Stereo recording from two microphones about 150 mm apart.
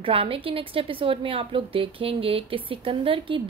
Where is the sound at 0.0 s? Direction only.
40° right (ahead or behind).